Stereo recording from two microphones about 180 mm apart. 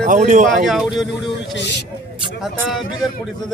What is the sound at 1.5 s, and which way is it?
Speech, 75° left (ahead or behind).